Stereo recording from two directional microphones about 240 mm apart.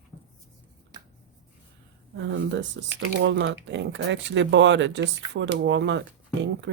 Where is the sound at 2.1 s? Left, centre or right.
Right.